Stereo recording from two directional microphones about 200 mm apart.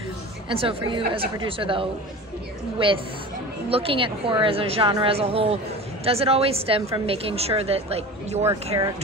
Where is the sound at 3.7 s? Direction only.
25° right (ahead or behind).